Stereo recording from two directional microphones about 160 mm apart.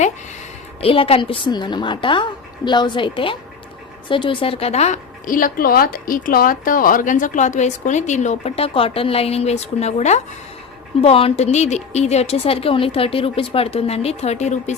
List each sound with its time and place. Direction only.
0.8 s a woman's voice: 35° left (ahead or behind)